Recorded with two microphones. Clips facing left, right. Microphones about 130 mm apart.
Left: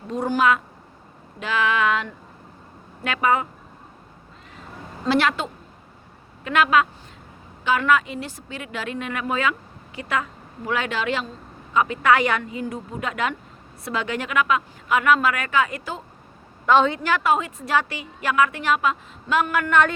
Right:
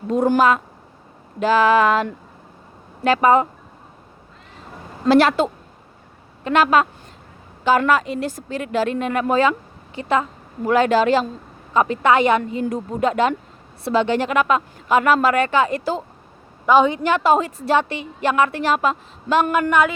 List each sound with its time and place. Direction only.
0.1 s a woman's voice: 50° right (ahead or behind)
1.4 s a woman's voice: 35° right (ahead or behind)
5.0 s a woman's voice: 40° right (ahead or behind)
10.7 s a woman's voice: 40° right (ahead or behind)
12.1 s a woman's voice: 25° right (ahead or behind)
12.4 s a woman's voice: 35° right (ahead or behind)
16.6 s a woman's voice: 15° right (ahead or behind)